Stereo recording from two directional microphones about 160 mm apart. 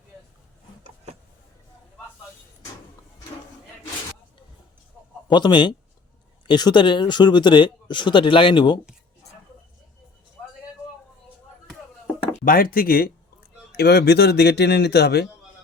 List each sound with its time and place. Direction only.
5.3 s speech: 30° left (ahead or behind)
12.5 s speech: 65° left (ahead or behind)
13.7 s a man's voice: 90° left